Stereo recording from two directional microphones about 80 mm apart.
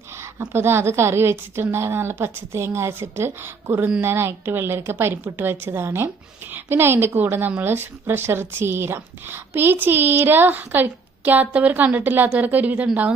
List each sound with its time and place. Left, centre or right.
0.2 s a woman's voice: right; by 13.1 s centre